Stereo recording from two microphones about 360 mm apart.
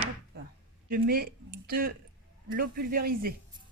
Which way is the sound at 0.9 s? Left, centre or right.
Right.